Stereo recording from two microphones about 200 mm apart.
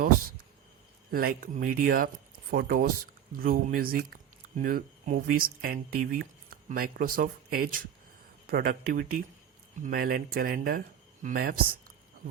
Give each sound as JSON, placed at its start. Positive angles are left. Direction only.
{"t": 1.1, "sound": "speech", "side_deg": -45}